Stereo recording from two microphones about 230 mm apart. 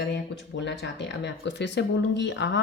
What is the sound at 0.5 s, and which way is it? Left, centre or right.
A woman's voice, left.